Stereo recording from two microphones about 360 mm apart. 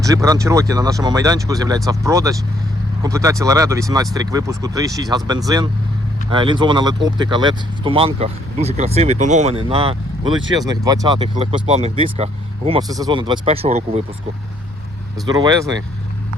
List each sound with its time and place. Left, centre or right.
0.0 s speech: centre
15.3 s speech: centre